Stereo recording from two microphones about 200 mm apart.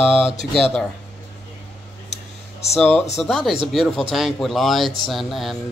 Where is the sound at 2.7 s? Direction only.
5° left (ahead or behind).